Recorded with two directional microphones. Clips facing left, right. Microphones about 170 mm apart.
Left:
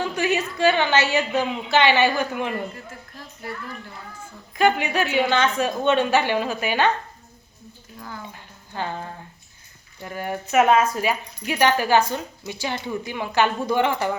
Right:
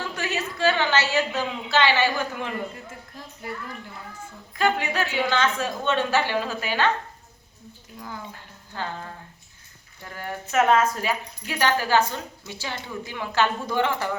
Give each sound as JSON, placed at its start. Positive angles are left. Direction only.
{"t": 0.0, "sound": "speech", "side_deg": 15}
{"t": 3.4, "sound": "a child's voice", "side_deg": -20}
{"t": 4.5, "sound": "speech", "side_deg": 15}
{"t": 7.9, "sound": "speech", "side_deg": -10}
{"t": 8.7, "sound": "speech", "side_deg": 15}